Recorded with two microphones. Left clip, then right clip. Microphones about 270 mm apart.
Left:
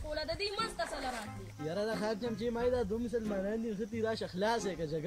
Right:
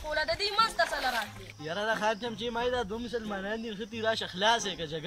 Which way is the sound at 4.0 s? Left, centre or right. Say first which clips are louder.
Right 6 dB; right.